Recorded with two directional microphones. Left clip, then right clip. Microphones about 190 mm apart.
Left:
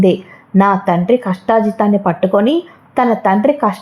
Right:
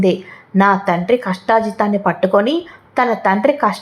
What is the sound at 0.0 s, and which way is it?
A woman's voice, 20° left (ahead or behind).